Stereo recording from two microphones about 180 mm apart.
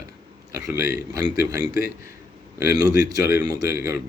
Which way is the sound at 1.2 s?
20° right (ahead or behind).